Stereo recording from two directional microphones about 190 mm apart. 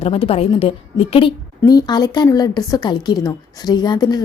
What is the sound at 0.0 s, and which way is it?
A woman's voice, 30° left (ahead or behind).